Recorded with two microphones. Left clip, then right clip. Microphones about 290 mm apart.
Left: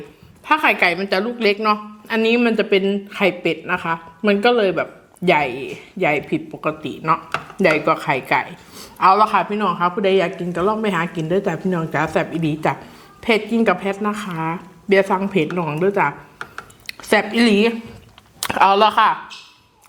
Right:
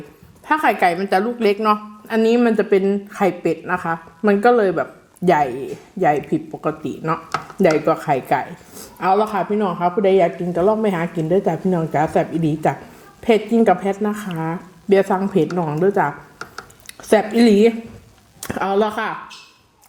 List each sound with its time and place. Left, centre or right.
0.4 s a woman's voice: left
18.3 s speech: left